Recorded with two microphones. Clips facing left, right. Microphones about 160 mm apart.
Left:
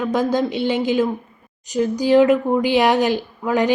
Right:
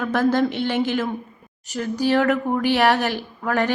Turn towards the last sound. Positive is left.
turn(degrees=15)  # may be behind; listen again after turning